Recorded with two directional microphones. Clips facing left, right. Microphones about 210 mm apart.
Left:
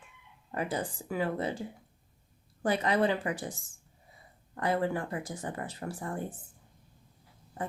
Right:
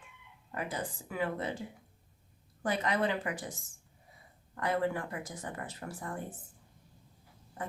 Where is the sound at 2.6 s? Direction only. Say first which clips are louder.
Left 4 dB; 30° left (ahead or behind).